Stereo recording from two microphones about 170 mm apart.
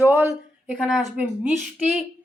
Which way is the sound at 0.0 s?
10° right (ahead or behind).